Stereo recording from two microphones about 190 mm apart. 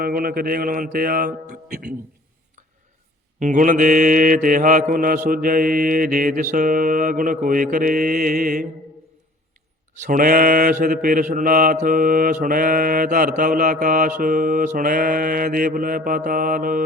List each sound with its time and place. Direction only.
0.0 s mantra: 50° right (ahead or behind)
3.4 s mantra: 45° right (ahead or behind)
10.0 s mantra: 45° right (ahead or behind)